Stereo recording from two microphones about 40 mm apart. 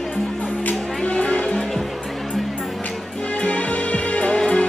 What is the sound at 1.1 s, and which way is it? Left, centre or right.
Music, left.